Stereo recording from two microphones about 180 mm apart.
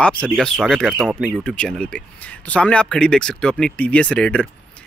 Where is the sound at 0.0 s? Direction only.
5° left (ahead or behind).